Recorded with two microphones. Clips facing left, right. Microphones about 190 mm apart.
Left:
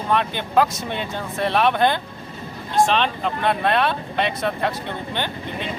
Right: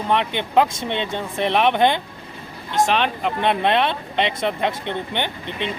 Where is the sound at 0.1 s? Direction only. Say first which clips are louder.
Right 1 dB; 20° right (ahead or behind).